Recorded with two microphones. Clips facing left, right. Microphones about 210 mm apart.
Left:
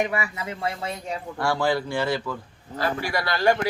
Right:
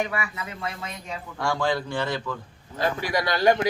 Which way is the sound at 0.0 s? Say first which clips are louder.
Left 3 dB; 25° left (ahead or behind).